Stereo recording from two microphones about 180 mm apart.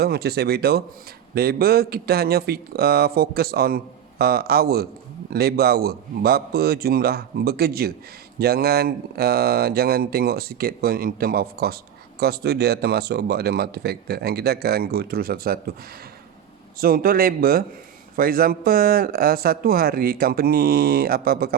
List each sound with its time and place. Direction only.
0.0 s speech: 60° right (ahead or behind)
16.7 s speech: 55° right (ahead or behind)